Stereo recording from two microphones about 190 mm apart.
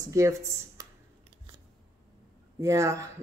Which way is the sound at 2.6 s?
15° right (ahead or behind).